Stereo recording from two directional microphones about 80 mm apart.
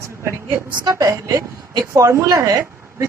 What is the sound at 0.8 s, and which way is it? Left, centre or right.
A woman's voice, right.